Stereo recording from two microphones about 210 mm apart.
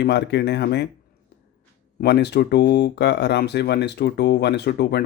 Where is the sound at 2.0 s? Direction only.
50° left (ahead or behind).